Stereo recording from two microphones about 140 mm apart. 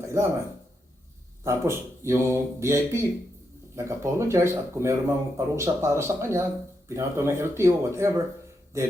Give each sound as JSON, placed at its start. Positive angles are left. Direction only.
{"t": 1.5, "sound": "speech", "side_deg": -20}